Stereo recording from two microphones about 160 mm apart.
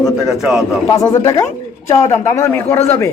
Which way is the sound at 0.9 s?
20° left (ahead or behind).